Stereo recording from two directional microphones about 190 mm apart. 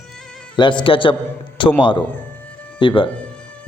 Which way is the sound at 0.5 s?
25° left (ahead or behind).